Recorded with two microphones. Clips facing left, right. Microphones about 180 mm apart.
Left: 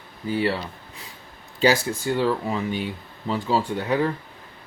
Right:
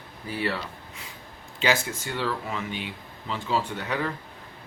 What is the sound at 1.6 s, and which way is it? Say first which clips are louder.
Speech: left 6 dB; 35° left (ahead or behind).